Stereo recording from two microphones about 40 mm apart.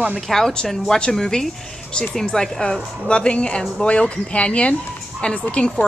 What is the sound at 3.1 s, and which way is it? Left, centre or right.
Speech, left.